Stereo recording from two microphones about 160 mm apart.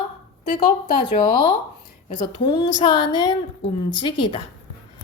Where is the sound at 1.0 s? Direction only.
30° left (ahead or behind).